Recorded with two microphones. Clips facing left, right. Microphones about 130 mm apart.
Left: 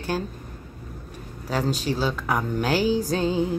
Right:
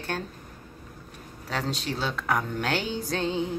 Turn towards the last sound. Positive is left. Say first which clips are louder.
# left 5 dB
turn(degrees=5)  # may be behind; listen again after turning